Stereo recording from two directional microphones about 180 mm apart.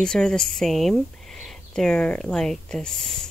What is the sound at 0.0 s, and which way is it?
Speech, 5° left (ahead or behind).